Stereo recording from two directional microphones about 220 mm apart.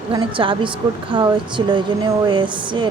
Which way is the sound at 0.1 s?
25° right (ahead or behind).